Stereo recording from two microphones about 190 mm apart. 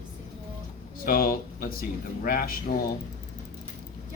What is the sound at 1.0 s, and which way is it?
Speech, 50° left (ahead or behind).